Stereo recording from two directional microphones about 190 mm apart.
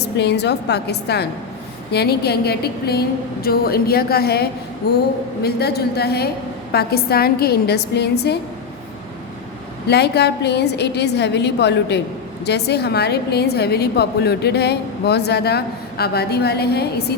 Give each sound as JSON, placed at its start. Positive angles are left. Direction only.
{"t": 0.0, "sound": "a woman's voice", "side_deg": 60}
{"t": 9.8, "sound": "a woman's voice", "side_deg": 60}